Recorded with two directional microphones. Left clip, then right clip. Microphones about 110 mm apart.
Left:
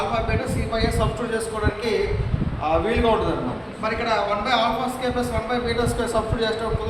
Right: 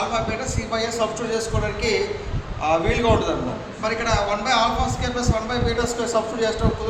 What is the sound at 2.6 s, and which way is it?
A man's voice, 50° right (ahead or behind).